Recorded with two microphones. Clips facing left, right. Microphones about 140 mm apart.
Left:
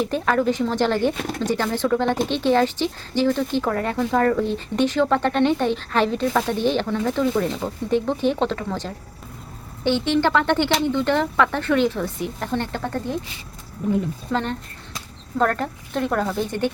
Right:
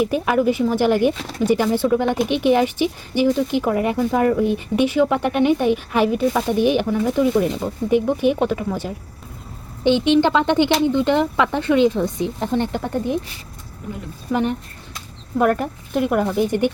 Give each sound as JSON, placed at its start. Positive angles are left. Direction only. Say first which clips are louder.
{"t": 0.0, "sound": "speech", "louder": "right 3 dB", "side_deg": -10}
{"t": 14.3, "sound": "speech", "louder": "right 5 dB", "side_deg": -15}